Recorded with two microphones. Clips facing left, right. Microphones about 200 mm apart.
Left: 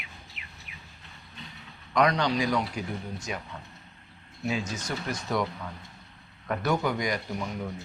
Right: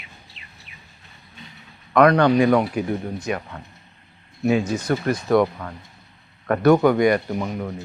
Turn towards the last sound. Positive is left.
turn(degrees=-60)  # may be behind; listen again after turning